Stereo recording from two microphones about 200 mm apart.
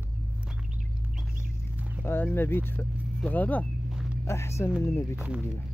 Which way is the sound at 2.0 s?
10° left (ahead or behind).